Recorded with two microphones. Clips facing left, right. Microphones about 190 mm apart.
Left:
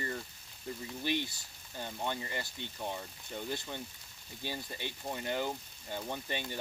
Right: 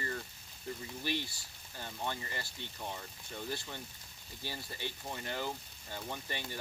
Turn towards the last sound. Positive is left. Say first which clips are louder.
# left 3 dB
turn(degrees=20)  # may be behind; listen again after turning